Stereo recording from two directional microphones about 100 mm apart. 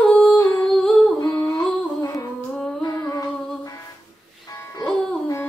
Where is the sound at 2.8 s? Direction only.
35° left (ahead or behind).